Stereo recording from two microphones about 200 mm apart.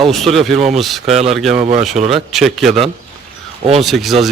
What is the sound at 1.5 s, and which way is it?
Speech, 35° right (ahead or behind).